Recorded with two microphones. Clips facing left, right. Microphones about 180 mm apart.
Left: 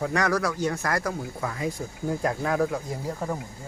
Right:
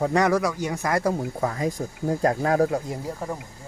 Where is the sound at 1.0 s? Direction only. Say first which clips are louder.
Right 6 dB; 35° right (ahead or behind).